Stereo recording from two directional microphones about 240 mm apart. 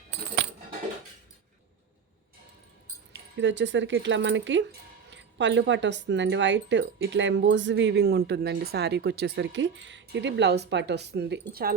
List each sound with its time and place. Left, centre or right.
3.3 s speech: right